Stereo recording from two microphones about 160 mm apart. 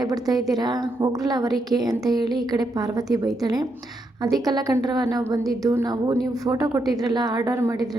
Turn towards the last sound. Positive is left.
turn(degrees=-20)  # may be behind; listen again after turning